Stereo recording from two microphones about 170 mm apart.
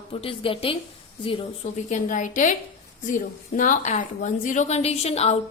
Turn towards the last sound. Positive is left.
turn(degrees=40)  # may be behind; listen again after turning